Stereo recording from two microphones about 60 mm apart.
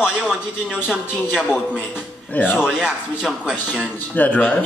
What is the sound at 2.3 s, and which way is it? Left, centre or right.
Speech, left.